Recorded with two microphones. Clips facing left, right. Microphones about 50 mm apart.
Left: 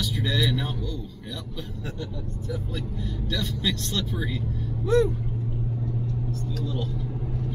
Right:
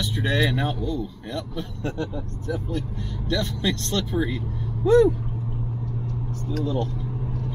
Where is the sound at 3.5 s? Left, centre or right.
Right.